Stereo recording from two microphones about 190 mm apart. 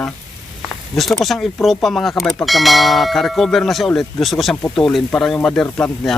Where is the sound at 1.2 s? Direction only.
Centre (ahead or behind).